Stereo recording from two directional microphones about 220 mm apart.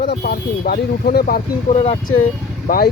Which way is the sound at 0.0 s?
50° left (ahead or behind).